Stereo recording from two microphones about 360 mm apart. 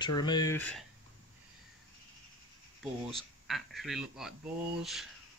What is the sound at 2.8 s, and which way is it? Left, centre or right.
Speech, centre.